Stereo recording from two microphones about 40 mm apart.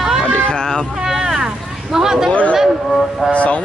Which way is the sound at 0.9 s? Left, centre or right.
Centre.